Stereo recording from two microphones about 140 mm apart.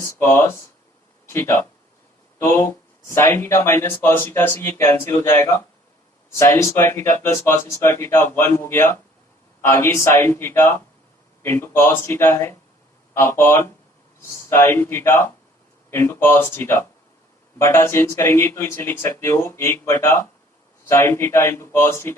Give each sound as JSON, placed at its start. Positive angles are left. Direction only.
{"t": 0.0, "sound": "speech", "side_deg": 15}